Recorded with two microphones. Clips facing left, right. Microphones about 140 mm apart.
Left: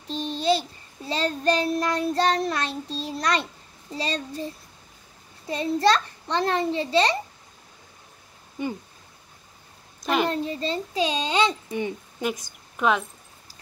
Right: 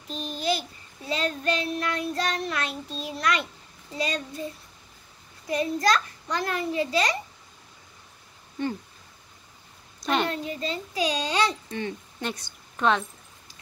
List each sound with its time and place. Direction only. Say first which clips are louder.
0.1 s child singing: left 5 dB; 30° left (ahead or behind)
3.9 s a child's voice: left 1 dB; 30° left (ahead or behind)
5.5 s a child's voice: left 2 dB; 25° left (ahead or behind)
8.6 s speech: even; 10° left (ahead or behind)
10.0 s a sound: left 2 dB; 5° left (ahead or behind)
10.3 s a child's voice: left 4 dB; 30° left (ahead or behind); by 13.0 s 5° left (ahead or behind)